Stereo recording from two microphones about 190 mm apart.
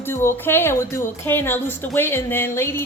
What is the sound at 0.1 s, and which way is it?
A woman's voice, 15° left (ahead or behind).